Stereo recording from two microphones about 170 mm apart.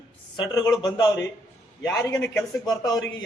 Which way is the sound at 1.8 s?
15° left (ahead or behind).